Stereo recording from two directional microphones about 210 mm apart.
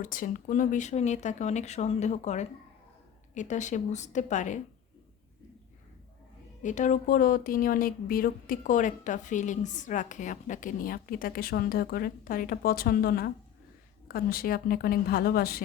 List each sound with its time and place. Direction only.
0.0 s speech: 40° left (ahead or behind)
6.6 s a woman's voice: 35° left (ahead or behind)